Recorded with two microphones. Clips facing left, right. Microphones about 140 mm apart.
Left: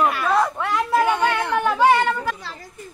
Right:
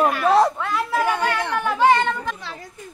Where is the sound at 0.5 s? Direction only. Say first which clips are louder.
Left 3 dB; 15° left (ahead or behind).